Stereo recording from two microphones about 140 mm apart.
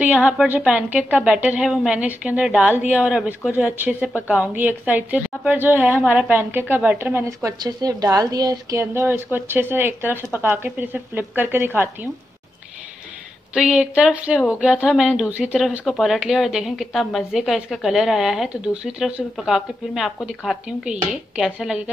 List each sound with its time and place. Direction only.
0.0 s a woman's voice: 10° right (ahead or behind)
13.6 s a woman's voice: 5° right (ahead or behind)